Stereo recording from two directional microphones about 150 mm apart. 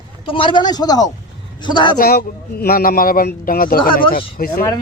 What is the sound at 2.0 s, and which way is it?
Speech, 90° left.